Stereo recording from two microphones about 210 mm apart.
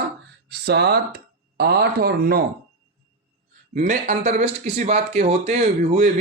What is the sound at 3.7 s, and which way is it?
Speech, 40° right (ahead or behind).